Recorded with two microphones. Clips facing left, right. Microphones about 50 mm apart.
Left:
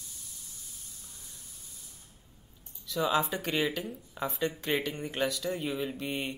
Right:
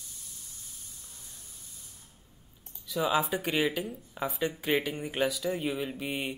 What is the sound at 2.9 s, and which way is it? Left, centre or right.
Speech, centre.